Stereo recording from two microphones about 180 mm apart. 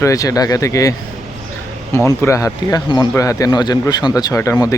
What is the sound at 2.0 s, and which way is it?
Speech, 15° left (ahead or behind).